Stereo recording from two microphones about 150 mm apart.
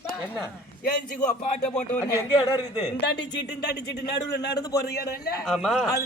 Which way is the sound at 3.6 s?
90° left.